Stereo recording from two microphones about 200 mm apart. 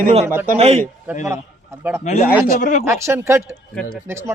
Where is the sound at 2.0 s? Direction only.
35° left (ahead or behind).